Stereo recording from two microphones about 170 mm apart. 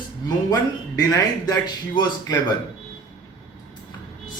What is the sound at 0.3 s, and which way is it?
Speech, 25° left (ahead or behind).